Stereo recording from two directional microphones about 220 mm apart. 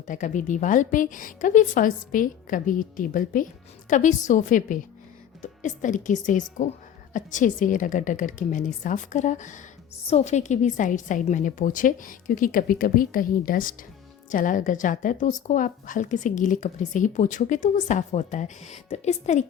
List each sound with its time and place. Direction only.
0.1 s a woman's voice: 35° left (ahead or behind)